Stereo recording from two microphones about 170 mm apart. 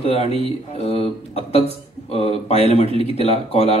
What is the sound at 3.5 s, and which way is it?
Speech, 35° left (ahead or behind).